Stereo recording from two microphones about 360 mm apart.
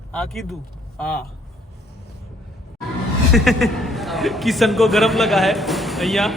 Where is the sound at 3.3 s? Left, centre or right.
Centre.